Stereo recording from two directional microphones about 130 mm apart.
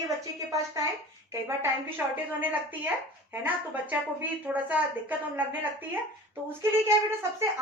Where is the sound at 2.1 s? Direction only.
15° right (ahead or behind).